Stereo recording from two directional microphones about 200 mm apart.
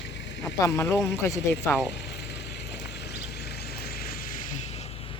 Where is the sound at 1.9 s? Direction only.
60° left (ahead or behind).